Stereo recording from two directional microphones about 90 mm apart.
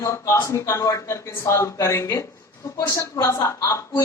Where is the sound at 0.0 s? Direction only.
35° left (ahead or behind).